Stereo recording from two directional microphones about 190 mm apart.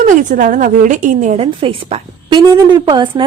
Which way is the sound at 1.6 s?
30° right (ahead or behind).